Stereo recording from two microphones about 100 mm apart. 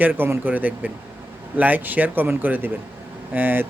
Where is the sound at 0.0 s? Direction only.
20° right (ahead or behind).